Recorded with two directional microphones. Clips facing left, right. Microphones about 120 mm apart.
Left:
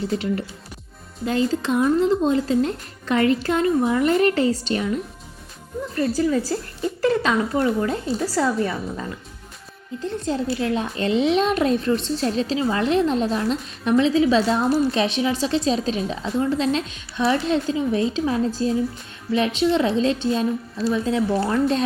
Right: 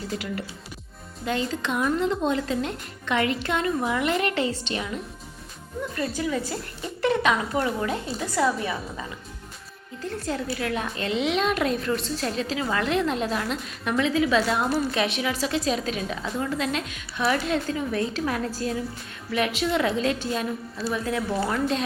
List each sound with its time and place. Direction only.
0.1 s a child's voice: 30° left (ahead or behind)
5.9 s speech: 35° left (ahead or behind)
8.4 s a woman's voice: 10° right (ahead or behind)
10.0 s a child's voice: 25° left (ahead or behind)
21.5 s speech: 35° left (ahead or behind)